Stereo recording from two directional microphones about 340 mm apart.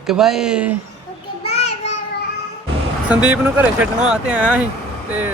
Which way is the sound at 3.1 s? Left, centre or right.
Centre.